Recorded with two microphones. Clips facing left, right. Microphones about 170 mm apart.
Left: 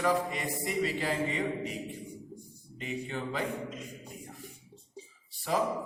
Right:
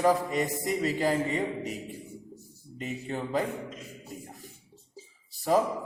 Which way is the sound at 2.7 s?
40° right (ahead or behind).